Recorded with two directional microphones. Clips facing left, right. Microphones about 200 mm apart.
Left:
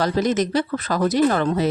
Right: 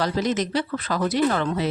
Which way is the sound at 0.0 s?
45° left (ahead or behind).